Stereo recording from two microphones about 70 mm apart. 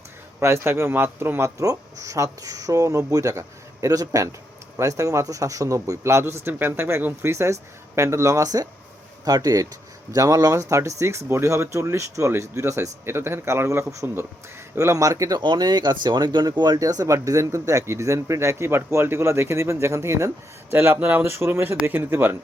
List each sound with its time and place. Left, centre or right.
0.3 s a man's voice: right
1.6 s a man's voice: right
15.4 s speech: right
16.7 s speech: right
17.1 s a man's voice: right